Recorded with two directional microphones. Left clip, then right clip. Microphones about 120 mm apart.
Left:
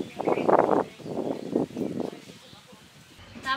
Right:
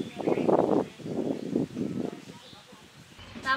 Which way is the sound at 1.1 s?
60° left (ahead or behind).